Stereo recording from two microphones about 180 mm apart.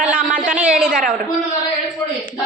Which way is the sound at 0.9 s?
50° right (ahead or behind).